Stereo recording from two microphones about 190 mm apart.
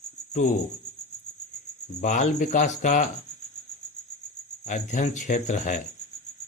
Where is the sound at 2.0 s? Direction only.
40° left (ahead or behind).